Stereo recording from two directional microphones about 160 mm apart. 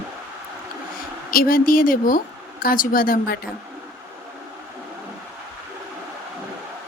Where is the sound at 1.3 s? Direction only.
65° left (ahead or behind).